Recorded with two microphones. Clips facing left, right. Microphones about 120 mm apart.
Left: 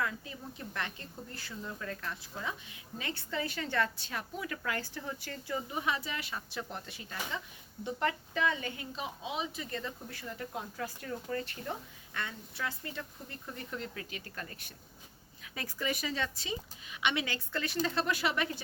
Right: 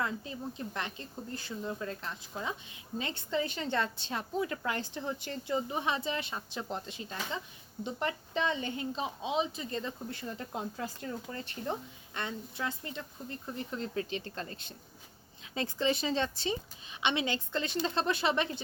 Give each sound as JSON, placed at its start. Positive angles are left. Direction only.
{"t": 0.0, "sound": "a woman's voice", "side_deg": -25}